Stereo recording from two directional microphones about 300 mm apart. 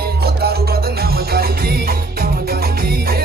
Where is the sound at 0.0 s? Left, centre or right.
Right.